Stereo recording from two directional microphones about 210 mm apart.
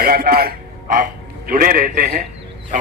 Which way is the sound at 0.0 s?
45° right (ahead or behind).